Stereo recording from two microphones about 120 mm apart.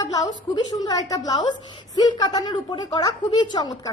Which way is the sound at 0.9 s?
35° left (ahead or behind).